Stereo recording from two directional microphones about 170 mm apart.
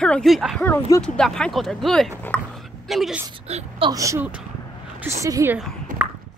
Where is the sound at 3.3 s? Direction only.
35° right (ahead or behind).